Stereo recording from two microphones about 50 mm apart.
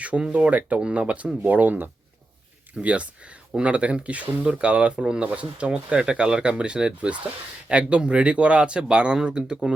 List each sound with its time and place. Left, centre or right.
0.0 s speech: right
2.7 s speech: right